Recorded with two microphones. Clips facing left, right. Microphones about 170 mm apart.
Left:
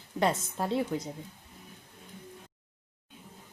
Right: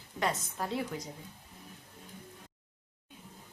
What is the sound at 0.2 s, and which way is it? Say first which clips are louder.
Speech: left 5 dB; 25° left (ahead or behind).